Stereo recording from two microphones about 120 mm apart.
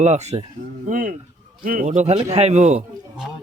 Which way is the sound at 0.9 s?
90° right.